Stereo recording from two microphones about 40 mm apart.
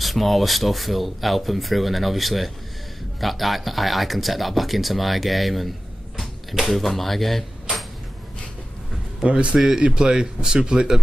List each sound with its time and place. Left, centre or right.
0.0 s speech: centre
9.2 s speech: right